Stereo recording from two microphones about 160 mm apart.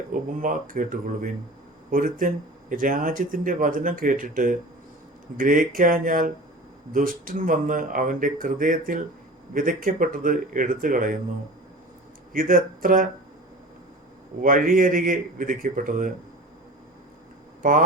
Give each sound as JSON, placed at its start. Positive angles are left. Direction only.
{"t": 0.1, "sound": "speech", "side_deg": -55}
{"t": 12.3, "sound": "speech", "side_deg": -60}
{"t": 14.4, "sound": "speech", "side_deg": -60}
{"t": 17.6, "sound": "speech", "side_deg": -55}